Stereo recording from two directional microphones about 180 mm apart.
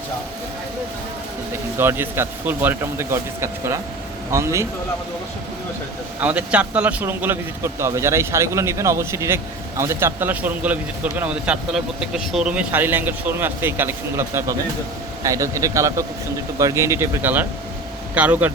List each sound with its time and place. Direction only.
1.8 s speech: 15° right (ahead or behind)
6.1 s speech: 10° right (ahead or behind)